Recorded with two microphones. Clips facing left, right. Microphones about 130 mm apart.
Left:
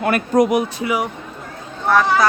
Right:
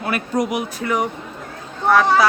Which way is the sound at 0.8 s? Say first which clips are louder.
Even; 10° left (ahead or behind).